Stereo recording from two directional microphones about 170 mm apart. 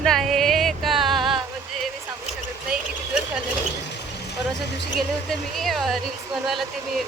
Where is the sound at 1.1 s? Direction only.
30° right (ahead or behind).